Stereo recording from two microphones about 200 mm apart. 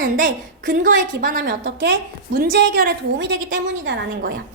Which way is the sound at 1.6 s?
60° right (ahead or behind).